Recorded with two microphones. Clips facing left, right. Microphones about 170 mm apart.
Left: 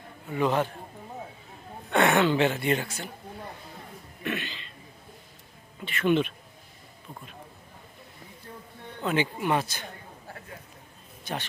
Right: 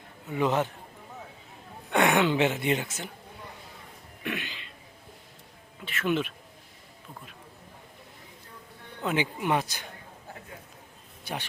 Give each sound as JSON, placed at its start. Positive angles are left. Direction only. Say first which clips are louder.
{"t": 0.3, "sound": "a man's voice", "louder": "left 1 dB", "side_deg": -20}
{"t": 1.9, "sound": "a woman's voice", "louder": "left 1 dB", "side_deg": -15}
{"t": 4.2, "sound": "speech", "louder": "left 2 dB", "side_deg": -10}
{"t": 5.8, "sound": "speech", "louder": "left 4 dB", "side_deg": -5}
{"t": 9.0, "sound": "a woman's voice", "louder": "left 1 dB", "side_deg": -15}